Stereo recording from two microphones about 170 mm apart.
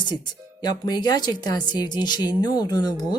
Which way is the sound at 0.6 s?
25° left (ahead or behind).